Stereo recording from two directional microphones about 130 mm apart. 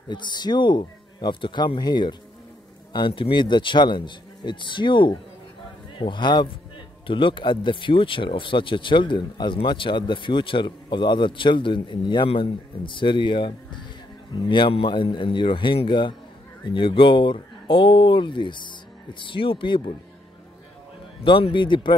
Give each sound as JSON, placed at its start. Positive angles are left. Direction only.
{"t": 0.1, "sound": "speech", "side_deg": 35}
{"t": 21.2, "sound": "speech", "side_deg": 40}